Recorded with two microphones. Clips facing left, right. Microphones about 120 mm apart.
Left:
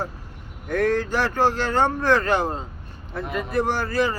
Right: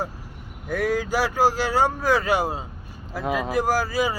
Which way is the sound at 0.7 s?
10° right (ahead or behind).